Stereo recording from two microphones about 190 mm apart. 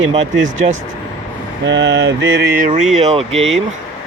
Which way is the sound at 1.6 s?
75° right (ahead or behind).